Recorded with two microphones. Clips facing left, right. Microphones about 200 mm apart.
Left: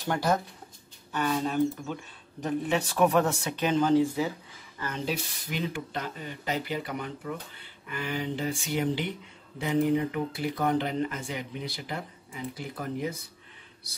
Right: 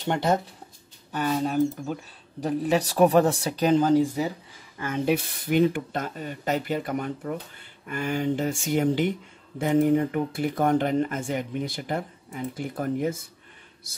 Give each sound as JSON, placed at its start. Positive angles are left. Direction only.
{"t": 0.0, "sound": "speech", "side_deg": -25}
{"t": 1.1, "sound": "speech", "side_deg": -40}
{"t": 4.8, "sound": "speech", "side_deg": -55}